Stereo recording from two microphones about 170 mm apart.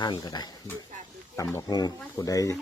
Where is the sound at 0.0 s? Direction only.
25° left (ahead or behind).